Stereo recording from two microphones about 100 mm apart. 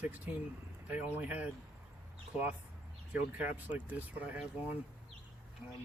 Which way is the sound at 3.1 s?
15° right (ahead or behind).